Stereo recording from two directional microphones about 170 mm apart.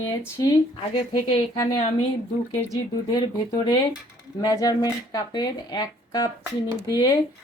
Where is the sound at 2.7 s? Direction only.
25° left (ahead or behind).